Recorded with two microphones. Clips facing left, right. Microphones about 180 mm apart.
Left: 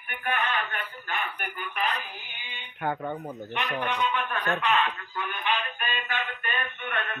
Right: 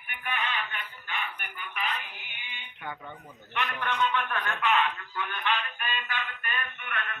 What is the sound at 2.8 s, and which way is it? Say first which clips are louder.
Speech: left 10 dB; 50° left (ahead or behind).